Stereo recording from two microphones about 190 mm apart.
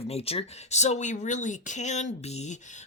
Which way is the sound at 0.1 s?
30° left (ahead or behind).